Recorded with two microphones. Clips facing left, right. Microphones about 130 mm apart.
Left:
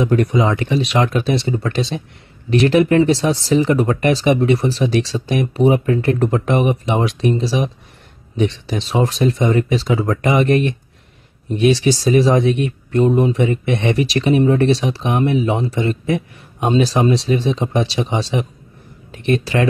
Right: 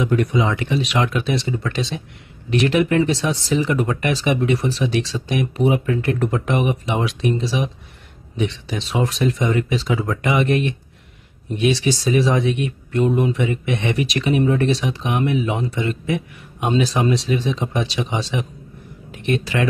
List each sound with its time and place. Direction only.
0.0 s speech: 40° left (ahead or behind)